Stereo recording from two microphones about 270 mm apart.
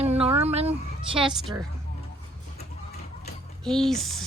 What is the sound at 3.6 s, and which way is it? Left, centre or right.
Speech, centre.